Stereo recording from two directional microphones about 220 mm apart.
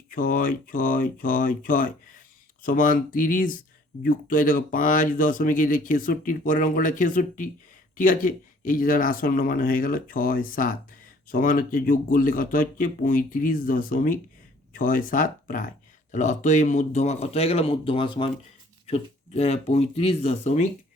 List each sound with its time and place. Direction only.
0.1 s speech: 40° left (ahead or behind)